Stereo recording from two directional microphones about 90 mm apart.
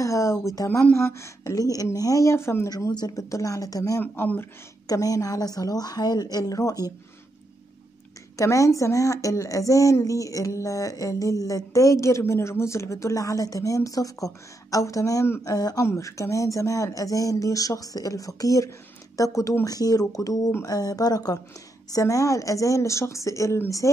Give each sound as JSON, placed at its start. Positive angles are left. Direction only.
{"t": 0.0, "sound": "a sound", "side_deg": 35}
{"t": 0.9, "sound": "speech", "side_deg": 30}
{"t": 2.7, "sound": "a woman's voice", "side_deg": 50}
{"t": 4.0, "sound": "speech", "side_deg": 20}
{"t": 4.8, "sound": "a woman's voice", "side_deg": 40}
{"t": 8.4, "sound": "speech", "side_deg": 35}
{"t": 15.5, "sound": "a woman's voice", "side_deg": 45}
{"t": 15.8, "sound": "a woman's voice", "side_deg": 35}